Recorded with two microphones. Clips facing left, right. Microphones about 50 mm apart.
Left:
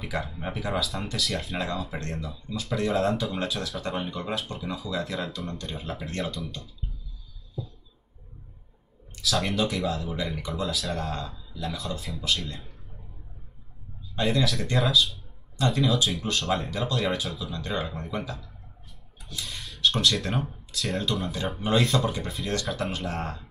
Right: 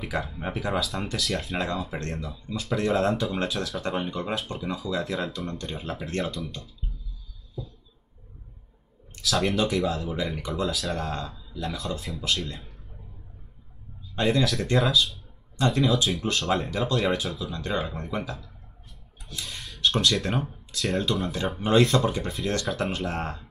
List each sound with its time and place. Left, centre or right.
0.0 s speech: centre
7.6 s a sound: centre
9.2 s speech: centre
14.2 s speech: centre